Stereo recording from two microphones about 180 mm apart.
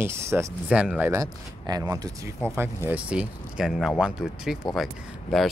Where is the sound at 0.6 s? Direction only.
5° right (ahead or behind).